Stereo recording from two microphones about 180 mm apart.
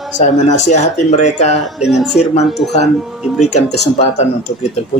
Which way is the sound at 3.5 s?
35° left (ahead or behind).